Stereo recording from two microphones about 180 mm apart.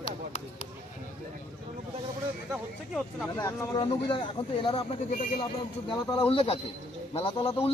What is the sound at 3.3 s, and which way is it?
Speech, 20° left (ahead or behind).